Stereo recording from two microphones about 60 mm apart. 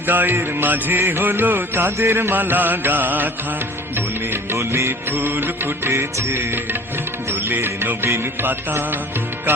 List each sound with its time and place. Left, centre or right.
0.1 s music: right
4.5 s music: right
5.9 s music: right